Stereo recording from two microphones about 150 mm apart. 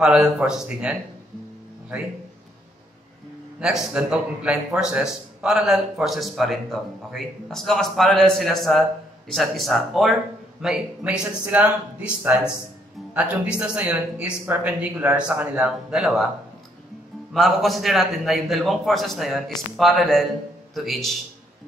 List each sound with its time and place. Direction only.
0.0 s a man's voice: 5° right (ahead or behind)
3.5 s a man's voice: 5° right (ahead or behind)
17.3 s a man's voice: centre (ahead or behind)